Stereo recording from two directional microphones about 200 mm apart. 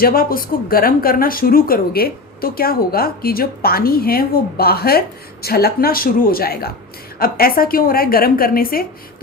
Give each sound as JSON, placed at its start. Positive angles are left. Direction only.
{"t": 0.0, "sound": "speech", "side_deg": 45}